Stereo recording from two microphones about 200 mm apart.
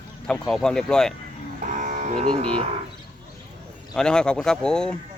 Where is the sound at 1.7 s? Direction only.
40° right (ahead or behind).